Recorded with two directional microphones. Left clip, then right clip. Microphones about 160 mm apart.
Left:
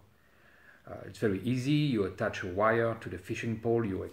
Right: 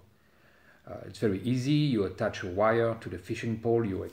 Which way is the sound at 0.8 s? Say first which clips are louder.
Right 1 dB; 5° left (ahead or behind).